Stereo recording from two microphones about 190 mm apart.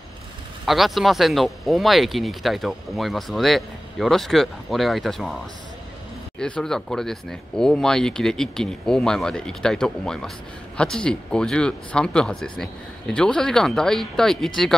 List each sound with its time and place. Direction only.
0.7 s speech: centre (ahead or behind)
6.4 s speech: 5° left (ahead or behind)